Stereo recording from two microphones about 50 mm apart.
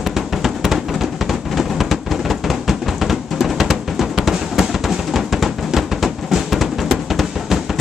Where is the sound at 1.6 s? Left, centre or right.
Centre.